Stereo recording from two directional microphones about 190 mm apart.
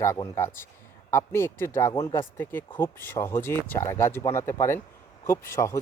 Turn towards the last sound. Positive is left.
turn(degrees=15)  # may be behind; listen again after turning